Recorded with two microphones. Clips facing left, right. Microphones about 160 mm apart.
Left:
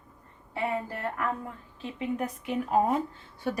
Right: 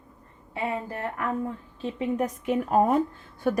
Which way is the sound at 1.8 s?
35° right (ahead or behind).